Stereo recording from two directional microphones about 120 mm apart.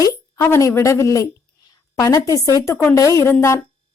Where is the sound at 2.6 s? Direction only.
20° left (ahead or behind).